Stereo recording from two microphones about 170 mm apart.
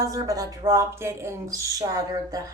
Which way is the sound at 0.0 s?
20° right (ahead or behind).